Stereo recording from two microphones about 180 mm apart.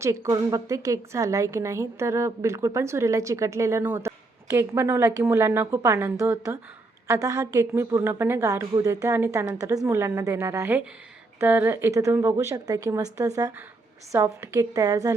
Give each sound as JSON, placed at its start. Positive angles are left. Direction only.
{"t": 0.0, "sound": "a woman's voice", "side_deg": -15}